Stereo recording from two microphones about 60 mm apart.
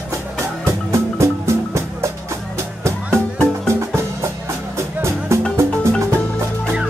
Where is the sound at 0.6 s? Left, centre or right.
Right.